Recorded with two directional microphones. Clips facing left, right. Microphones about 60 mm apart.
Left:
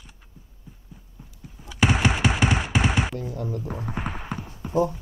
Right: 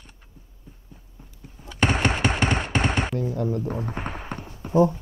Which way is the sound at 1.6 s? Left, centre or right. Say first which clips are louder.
Left 1 dB; centre.